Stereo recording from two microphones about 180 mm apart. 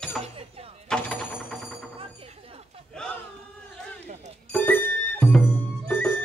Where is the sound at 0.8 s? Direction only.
5° left (ahead or behind).